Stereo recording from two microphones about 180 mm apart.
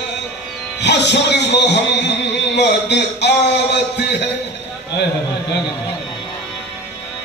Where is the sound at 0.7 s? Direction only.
75° left (ahead or behind).